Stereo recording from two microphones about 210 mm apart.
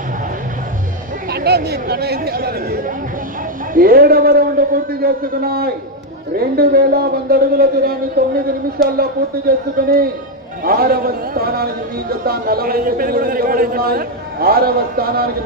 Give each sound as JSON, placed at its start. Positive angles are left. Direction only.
{"t": 1.3, "sound": "a man's voice", "side_deg": -50}
{"t": 9.8, "sound": "a man's voice", "side_deg": -45}